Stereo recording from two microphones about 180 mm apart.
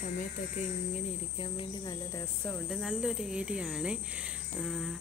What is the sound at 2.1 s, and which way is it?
Speech, 15° left (ahead or behind).